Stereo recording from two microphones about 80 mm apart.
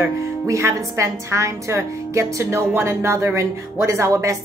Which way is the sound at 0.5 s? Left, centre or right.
Right.